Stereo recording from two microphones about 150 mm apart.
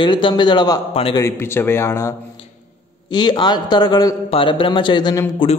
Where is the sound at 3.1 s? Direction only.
30° left (ahead or behind).